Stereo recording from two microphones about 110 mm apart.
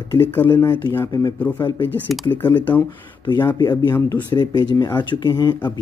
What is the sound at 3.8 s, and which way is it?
Speech, 40° left (ahead or behind).